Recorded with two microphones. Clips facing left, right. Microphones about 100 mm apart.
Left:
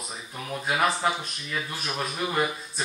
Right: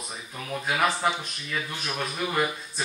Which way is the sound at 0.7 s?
5° left (ahead or behind).